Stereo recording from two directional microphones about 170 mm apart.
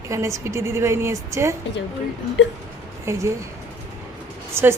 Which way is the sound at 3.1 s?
15° right (ahead or behind).